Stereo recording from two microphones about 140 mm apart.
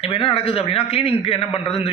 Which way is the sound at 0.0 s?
40° left (ahead or behind).